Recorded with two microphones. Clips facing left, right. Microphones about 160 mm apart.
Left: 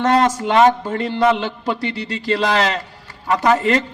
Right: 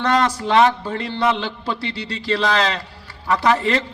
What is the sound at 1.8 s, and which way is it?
Speech, 35° right (ahead or behind).